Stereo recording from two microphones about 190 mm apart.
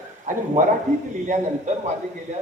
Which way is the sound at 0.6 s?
40° right (ahead or behind).